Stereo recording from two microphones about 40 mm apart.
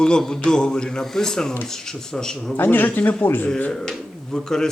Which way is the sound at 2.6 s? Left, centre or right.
Left.